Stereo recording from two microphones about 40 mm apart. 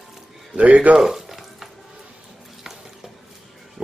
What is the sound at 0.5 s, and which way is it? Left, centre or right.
Speech, right.